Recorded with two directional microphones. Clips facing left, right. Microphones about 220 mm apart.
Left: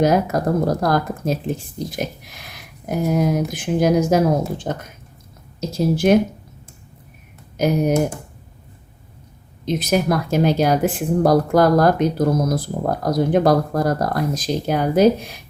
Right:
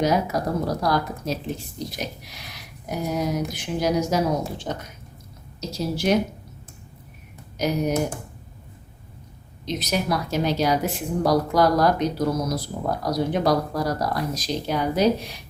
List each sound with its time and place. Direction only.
0.0 s speech: 50° left (ahead or behind)
7.5 s speech: 50° left (ahead or behind)
9.6 s speech: 50° left (ahead or behind)